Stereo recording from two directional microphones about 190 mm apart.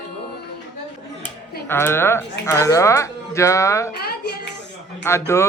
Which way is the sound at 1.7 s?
10° left (ahead or behind).